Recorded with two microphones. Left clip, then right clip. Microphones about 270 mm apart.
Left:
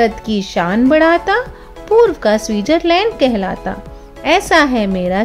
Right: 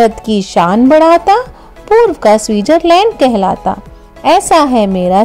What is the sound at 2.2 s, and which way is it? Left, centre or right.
Speech, centre.